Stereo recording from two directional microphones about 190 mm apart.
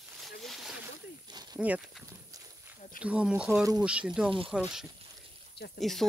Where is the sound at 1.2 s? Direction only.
20° right (ahead or behind).